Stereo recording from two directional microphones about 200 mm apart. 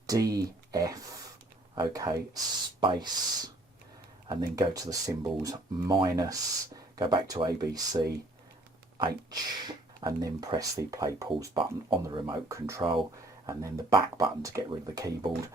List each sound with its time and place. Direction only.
0.1 s speech: 20° right (ahead or behind)
12.8 s speech: 25° right (ahead or behind)